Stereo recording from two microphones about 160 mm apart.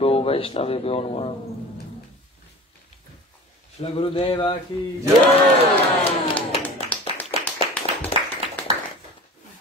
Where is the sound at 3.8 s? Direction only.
35° left (ahead or behind).